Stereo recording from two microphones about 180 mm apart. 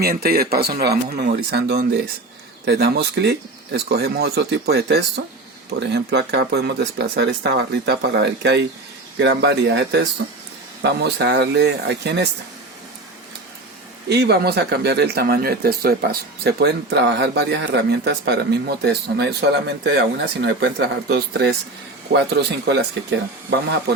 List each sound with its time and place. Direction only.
0.0 s speech: 60° right (ahead or behind)
14.1 s speech: 65° right (ahead or behind)